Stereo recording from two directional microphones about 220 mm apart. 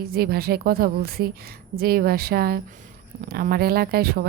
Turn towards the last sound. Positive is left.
turn(degrees=-45)  # may be behind; listen again after turning